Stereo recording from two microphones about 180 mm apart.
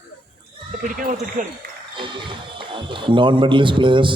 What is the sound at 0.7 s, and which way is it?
Speech, 55° right (ahead or behind).